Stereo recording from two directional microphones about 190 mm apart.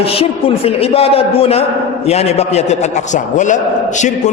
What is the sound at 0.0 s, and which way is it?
A man's voice, 30° left (ahead or behind).